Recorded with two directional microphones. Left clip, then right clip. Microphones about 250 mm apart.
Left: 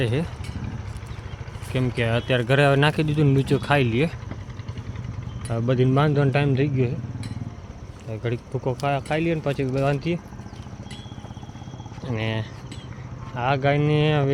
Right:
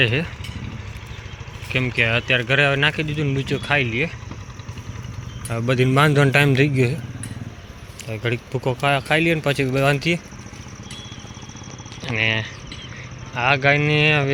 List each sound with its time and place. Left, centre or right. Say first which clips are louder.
0.0 s speech: right 7 dB; centre
1.7 s speech: right 5 dB; centre; by 4.1 s left
5.5 s speech: right 2 dB; centre
8.1 s speech: right 4 dB; centre
12.1 s speech: right 9 dB; centre